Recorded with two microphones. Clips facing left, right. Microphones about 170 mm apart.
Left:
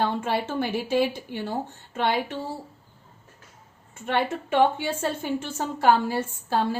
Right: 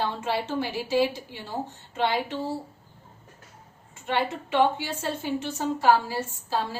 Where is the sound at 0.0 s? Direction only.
55° left (ahead or behind).